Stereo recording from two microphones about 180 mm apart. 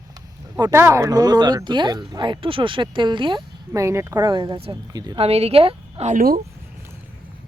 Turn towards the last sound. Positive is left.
turn(degrees=-40)  # may be behind; listen again after turning